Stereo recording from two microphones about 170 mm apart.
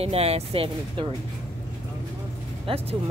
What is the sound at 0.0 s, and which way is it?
Speech, 35° right (ahead or behind).